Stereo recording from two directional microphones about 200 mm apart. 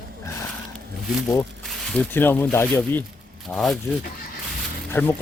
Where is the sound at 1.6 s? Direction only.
5° left (ahead or behind).